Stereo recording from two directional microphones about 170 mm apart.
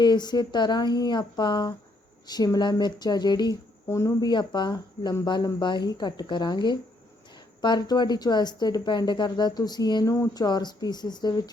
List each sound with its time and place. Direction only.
0.0 s speech: 25° left (ahead or behind)